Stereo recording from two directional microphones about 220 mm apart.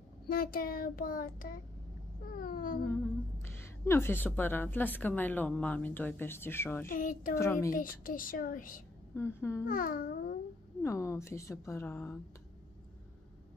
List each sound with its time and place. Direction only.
0.3 s child singing: 40° left (ahead or behind)
3.4 s a woman's voice: 10° left (ahead or behind)
6.9 s child singing: 35° left (ahead or behind)
9.1 s a woman's voice: 10° left (ahead or behind)
9.7 s child singing: 40° left (ahead or behind)
10.8 s a woman's voice: 15° left (ahead or behind)